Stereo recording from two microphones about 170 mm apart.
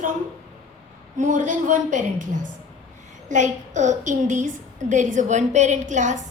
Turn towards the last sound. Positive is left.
turn(degrees=-45)  # may be behind; listen again after turning